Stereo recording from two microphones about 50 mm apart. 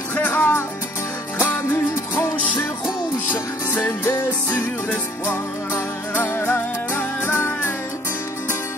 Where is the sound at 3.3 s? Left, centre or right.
Left.